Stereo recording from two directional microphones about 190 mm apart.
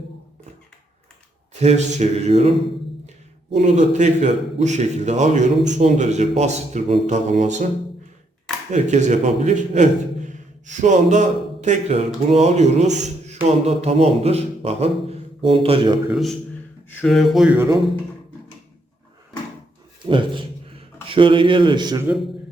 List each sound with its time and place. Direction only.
1.5 s a man's voice: 35° right (ahead or behind)
8.7 s a man's voice: 40° right (ahead or behind)
17.0 s speech: centre (ahead or behind)
20.1 s speech: 25° right (ahead or behind)